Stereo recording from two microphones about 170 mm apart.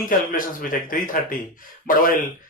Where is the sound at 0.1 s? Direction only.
55° left (ahead or behind).